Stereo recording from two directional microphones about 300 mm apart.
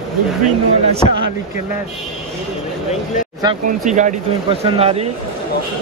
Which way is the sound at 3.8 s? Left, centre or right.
Right.